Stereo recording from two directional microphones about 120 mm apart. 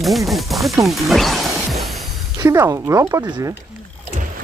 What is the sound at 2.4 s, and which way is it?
Speech, 25° right (ahead or behind).